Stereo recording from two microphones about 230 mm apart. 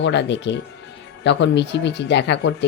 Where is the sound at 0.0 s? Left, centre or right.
Left.